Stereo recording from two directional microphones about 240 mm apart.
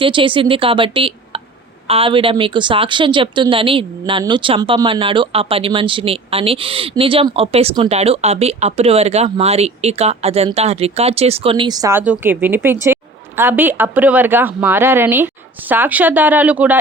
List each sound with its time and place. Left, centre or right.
0.0 s a woman's voice: right